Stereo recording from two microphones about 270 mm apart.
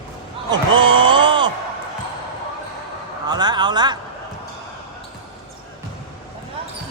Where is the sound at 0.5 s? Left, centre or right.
Centre.